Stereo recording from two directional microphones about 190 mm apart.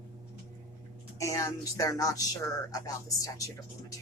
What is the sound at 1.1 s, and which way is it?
Speech, 15° left (ahead or behind).